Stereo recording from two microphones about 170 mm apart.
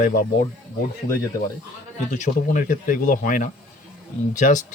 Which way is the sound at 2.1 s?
45° left (ahead or behind).